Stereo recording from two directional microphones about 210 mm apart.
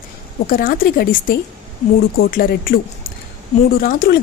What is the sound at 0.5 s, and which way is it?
A woman's voice, 45° left (ahead or behind).